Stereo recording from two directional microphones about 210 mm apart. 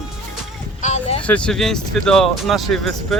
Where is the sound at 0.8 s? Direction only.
35° left (ahead or behind).